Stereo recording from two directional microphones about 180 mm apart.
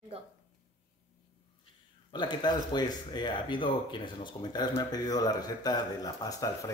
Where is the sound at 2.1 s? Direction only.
25° left (ahead or behind).